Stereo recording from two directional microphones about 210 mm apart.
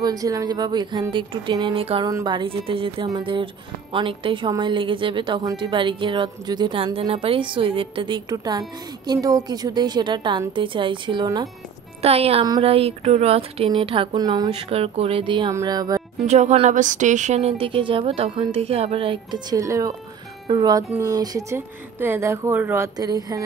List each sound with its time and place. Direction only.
0.0 s a woman's voice: 15° right (ahead or behind)
16.3 s a woman's voice: 35° right (ahead or behind)